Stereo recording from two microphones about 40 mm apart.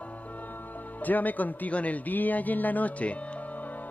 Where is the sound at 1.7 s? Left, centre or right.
Left.